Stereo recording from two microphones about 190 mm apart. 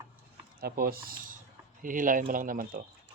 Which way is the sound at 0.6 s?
55° right (ahead or behind).